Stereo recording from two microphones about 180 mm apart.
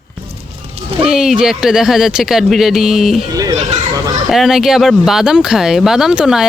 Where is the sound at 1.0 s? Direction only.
5° right (ahead or behind).